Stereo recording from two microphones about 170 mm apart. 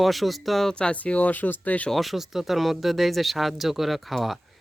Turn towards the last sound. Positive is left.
turn(degrees=0)  # may be behind; listen again after turning